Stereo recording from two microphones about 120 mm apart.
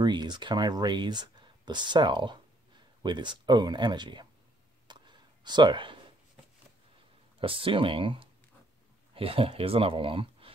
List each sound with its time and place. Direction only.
0.0 s speech: 40° right (ahead or behind)
4.8 s a sound: 40° right (ahead or behind)
7.3 s speech: 45° right (ahead or behind)